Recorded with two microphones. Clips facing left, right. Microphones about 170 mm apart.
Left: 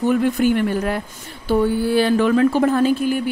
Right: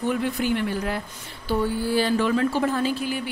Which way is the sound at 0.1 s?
50° left (ahead or behind).